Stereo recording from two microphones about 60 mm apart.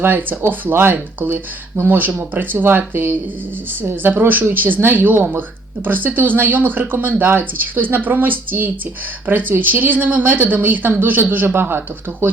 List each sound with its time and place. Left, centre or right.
0.0 s speech: right